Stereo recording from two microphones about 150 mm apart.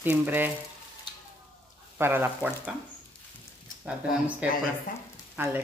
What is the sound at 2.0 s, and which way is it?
Speech, 15° right (ahead or behind).